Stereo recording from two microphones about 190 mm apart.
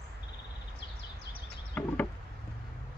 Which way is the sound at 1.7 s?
10° left (ahead or behind).